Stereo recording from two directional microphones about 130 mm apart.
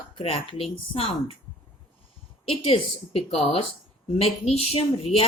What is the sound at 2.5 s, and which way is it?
Speech, 50° left (ahead or behind).